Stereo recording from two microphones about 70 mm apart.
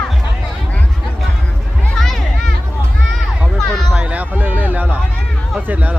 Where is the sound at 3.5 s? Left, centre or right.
Centre.